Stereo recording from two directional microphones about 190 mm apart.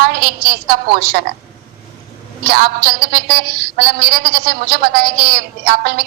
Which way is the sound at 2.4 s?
55° right (ahead or behind).